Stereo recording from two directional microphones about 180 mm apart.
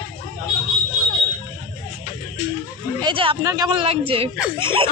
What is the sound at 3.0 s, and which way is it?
Speech, 30° right (ahead or behind).